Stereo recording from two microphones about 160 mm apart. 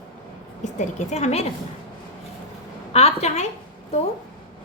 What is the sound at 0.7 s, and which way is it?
Speech, 45° left (ahead or behind).